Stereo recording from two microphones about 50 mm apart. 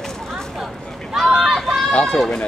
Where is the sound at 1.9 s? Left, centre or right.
Left.